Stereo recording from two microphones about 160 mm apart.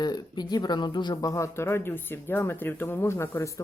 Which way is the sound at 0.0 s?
25° left (ahead or behind).